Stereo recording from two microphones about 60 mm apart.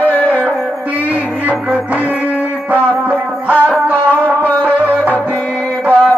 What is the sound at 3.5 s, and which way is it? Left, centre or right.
Music, left.